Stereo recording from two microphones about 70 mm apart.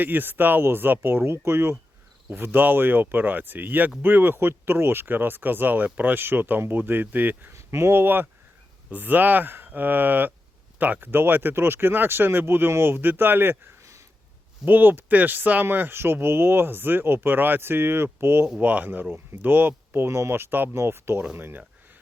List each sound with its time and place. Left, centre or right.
0.0 s speech: right
7.5 s speech: right
14.6 s speech: right
18.4 s speech: centre